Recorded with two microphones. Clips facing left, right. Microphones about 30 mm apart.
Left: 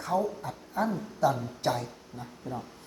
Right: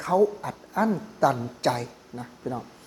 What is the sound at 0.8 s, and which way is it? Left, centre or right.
A woman's voice, right.